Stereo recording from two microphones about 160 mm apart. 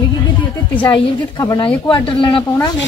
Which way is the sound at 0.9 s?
25° left (ahead or behind).